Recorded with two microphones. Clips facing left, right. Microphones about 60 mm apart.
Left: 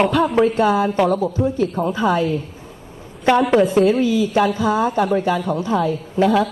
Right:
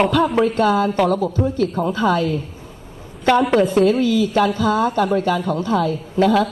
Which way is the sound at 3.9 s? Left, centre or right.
Centre.